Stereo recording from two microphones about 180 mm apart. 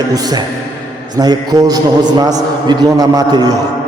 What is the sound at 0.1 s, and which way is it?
A man's voice, 20° right (ahead or behind).